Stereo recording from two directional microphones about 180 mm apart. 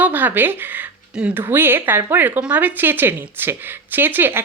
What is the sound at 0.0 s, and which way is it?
Speech, 10° right (ahead or behind).